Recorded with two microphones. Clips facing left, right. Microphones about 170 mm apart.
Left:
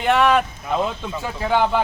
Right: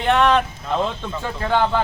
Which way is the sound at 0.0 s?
5° left (ahead or behind).